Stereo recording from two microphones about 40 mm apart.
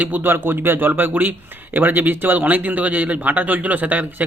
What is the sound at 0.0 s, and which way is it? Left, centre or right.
Speech, right.